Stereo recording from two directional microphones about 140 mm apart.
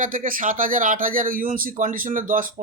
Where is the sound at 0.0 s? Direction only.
70° right (ahead or behind).